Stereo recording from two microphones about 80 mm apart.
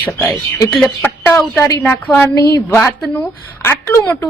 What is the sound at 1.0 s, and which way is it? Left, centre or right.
A woman's voice, left.